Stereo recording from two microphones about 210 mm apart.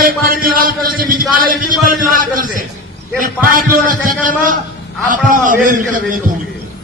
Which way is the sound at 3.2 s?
40° right (ahead or behind).